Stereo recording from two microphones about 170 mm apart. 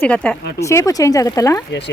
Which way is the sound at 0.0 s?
5° left (ahead or behind).